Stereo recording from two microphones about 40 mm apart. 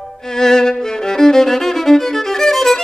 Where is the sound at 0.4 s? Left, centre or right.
Centre.